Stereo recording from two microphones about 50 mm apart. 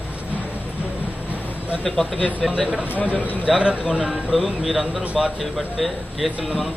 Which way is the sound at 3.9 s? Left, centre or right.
Centre.